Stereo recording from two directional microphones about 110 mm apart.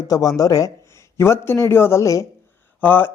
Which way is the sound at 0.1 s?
30° left (ahead or behind).